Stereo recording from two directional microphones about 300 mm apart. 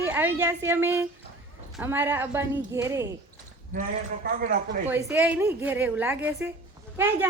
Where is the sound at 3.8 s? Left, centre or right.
Right.